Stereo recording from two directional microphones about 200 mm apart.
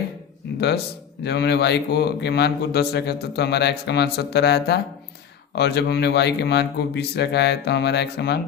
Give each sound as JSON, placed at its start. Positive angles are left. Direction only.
{"t": 1.2, "sound": "speech", "side_deg": 55}